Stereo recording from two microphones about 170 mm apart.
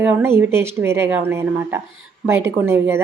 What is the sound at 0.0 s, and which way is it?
A woman's voice, 10° right (ahead or behind).